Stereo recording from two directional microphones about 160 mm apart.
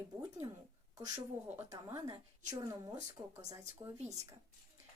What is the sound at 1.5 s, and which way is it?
A woman's voice, 20° right (ahead or behind).